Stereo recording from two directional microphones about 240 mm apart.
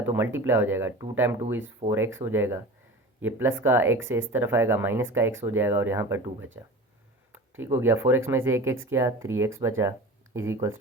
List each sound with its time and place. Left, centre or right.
0.0 s speech: centre
1.8 s speech: right
2.1 s speech: centre
7.6 s speech: centre